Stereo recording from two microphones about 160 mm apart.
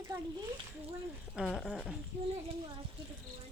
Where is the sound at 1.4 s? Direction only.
Centre (ahead or behind).